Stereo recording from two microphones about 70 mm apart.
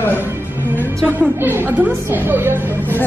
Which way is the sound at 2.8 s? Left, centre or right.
Left.